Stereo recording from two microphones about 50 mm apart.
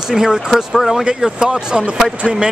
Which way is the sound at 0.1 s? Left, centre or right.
Centre.